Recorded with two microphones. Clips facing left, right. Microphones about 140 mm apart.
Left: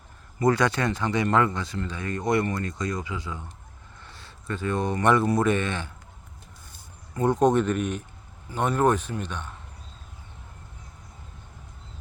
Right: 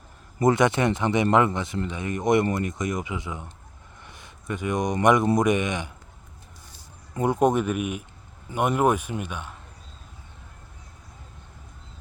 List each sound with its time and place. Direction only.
0.3 s speech: 20° right (ahead or behind)
7.1 s speech: 10° right (ahead or behind)